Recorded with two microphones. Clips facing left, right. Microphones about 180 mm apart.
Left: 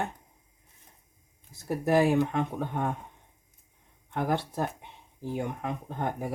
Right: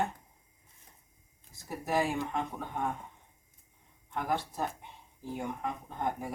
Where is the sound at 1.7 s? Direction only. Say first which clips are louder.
Left 8 dB; 65° left (ahead or behind).